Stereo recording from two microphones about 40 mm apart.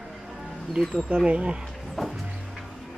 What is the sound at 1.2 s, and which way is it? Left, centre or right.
Speech, right.